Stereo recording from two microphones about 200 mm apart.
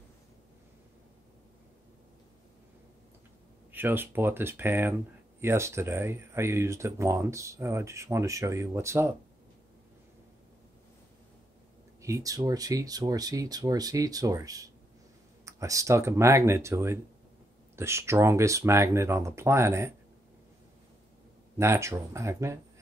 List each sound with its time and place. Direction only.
3.7 s speech: 10° right (ahead or behind)
12.0 s speech: 15° right (ahead or behind)
21.5 s speech: 15° right (ahead or behind)